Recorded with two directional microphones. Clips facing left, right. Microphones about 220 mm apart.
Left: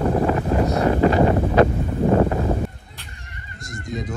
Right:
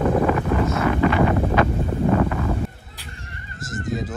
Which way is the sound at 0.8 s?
35° left (ahead or behind).